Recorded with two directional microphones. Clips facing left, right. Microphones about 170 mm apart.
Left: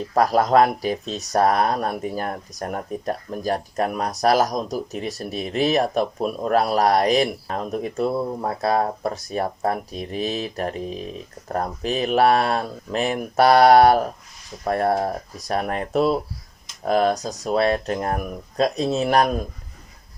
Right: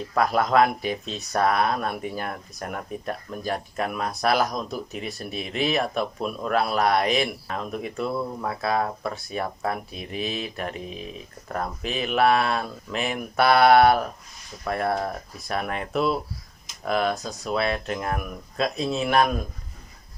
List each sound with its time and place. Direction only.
0.1 s speech: 40° left (ahead or behind)